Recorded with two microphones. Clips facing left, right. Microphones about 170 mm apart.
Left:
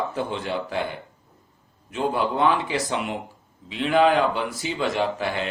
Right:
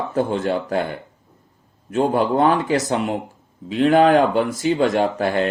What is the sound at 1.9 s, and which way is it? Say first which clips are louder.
Speech: right 6 dB; 45° right (ahead or behind).